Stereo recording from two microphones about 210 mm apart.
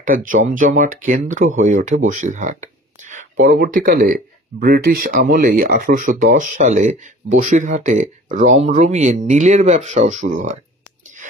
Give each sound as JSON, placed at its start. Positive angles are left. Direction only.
{"t": 0.0, "sound": "speech", "side_deg": -40}
{"t": 2.0, "sound": "a sound", "side_deg": -35}
{"t": 3.4, "sound": "speech", "side_deg": -45}